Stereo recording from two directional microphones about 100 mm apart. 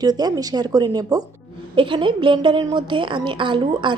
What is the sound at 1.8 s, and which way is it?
A woman's voice, 55° right (ahead or behind).